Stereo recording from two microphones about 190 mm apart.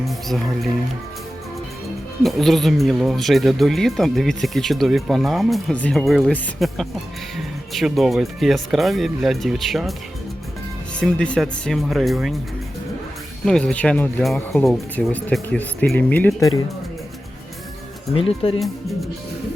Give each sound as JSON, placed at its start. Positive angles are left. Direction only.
{"t": 0.0, "sound": "speech", "side_deg": 0}
{"t": 2.2, "sound": "speech", "side_deg": 0}
{"t": 11.0, "sound": "speech", "side_deg": 5}
{"t": 13.4, "sound": "speech", "side_deg": 5}
{"t": 18.1, "sound": "speech", "side_deg": 30}